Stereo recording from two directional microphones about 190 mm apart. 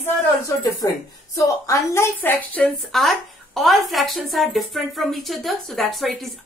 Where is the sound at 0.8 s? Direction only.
15° left (ahead or behind).